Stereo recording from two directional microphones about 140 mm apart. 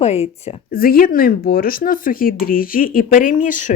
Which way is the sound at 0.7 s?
90° left.